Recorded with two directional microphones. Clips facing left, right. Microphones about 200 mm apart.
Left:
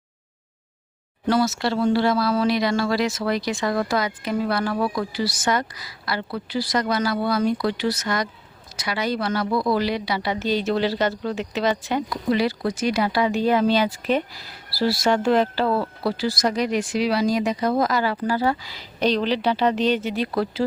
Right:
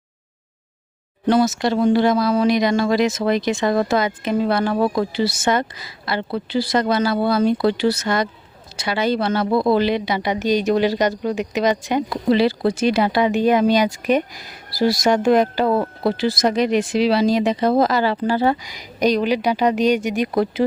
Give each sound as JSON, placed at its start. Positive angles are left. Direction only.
{"t": 1.3, "sound": "a woman's voice", "side_deg": -20}
{"t": 12.0, "sound": "a woman's voice", "side_deg": -30}